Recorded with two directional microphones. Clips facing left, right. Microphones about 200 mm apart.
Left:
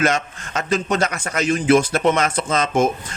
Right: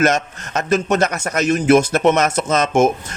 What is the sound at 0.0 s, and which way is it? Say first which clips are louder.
A man's voice: right 3 dB; 45° right (ahead or behind).